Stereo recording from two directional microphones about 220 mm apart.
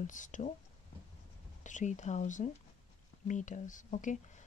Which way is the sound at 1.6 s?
35° left (ahead or behind).